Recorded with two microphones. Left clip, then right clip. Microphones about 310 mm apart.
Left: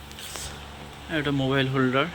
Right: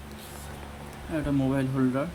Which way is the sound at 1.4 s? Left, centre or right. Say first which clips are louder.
Left 4 dB; centre.